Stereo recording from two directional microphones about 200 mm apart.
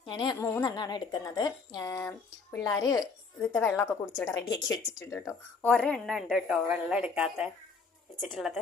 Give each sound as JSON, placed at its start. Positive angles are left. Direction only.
{"t": 0.0, "sound": "a woman's voice", "side_deg": 20}
{"t": 5.7, "sound": "a woman's voice", "side_deg": 5}